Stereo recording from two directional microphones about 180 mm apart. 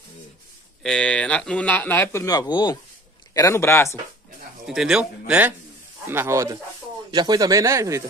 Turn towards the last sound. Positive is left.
turn(degrees=-15)  # may be behind; listen again after turning